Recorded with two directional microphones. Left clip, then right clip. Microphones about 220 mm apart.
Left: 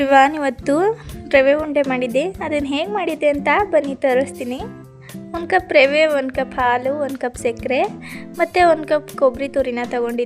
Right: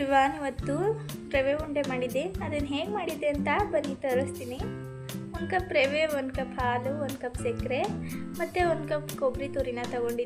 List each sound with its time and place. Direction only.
0.0 s a woman's voice: 50° left (ahead or behind)